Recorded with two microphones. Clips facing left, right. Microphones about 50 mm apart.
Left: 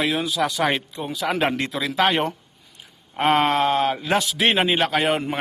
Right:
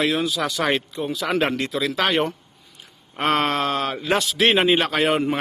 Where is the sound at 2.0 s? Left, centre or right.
Centre.